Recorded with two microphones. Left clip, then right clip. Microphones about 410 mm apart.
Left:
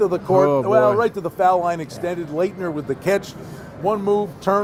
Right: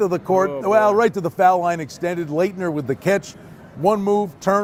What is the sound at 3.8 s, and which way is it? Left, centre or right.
Speech, right.